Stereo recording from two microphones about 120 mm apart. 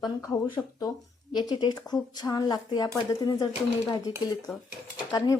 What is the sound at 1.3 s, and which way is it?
Speech, 35° left (ahead or behind).